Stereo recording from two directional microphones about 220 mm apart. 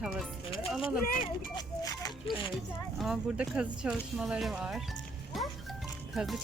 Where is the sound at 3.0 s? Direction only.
5° right (ahead or behind).